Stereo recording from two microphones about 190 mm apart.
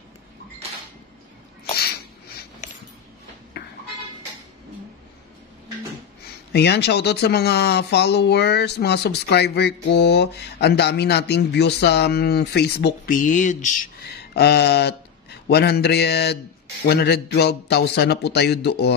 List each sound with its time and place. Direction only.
1.8 s a sound: 55° left (ahead or behind)
6.5 s speech: 60° left (ahead or behind); by 13.7 s 40° left (ahead or behind)
14.1 s speech: 60° left (ahead or behind)